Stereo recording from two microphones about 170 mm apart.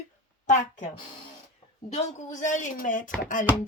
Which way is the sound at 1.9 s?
45° left (ahead or behind).